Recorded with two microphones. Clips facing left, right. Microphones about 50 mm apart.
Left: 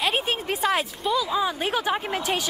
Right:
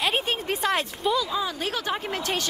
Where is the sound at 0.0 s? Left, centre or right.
Centre.